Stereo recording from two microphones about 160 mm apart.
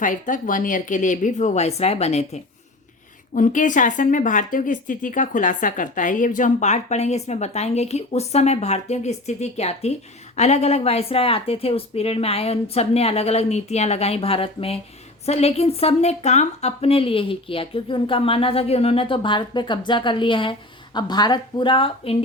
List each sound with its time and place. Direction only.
0.0 s a woman's voice: 55° left (ahead or behind); by 22.2 s 35° left (ahead or behind)